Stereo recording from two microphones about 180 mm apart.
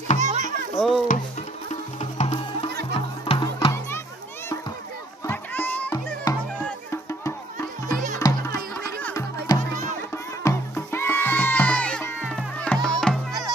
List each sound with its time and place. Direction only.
0.2 s music: 40° right (ahead or behind)
0.7 s music: centre (ahead or behind)
1.7 s music: 40° left (ahead or behind)
5.2 s a sound: 10° left (ahead or behind)
6.3 s music: 20° left (ahead or behind); by 13.2 s centre (ahead or behind)